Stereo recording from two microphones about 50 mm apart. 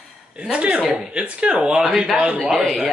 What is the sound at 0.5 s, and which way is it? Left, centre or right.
Speech, right.